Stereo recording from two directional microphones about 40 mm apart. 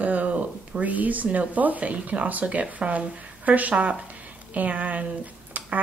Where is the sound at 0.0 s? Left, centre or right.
Right.